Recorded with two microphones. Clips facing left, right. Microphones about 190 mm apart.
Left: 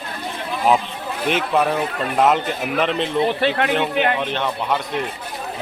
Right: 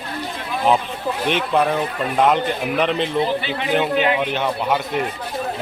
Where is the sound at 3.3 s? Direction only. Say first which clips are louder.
Left 4 dB; 65° left (ahead or behind).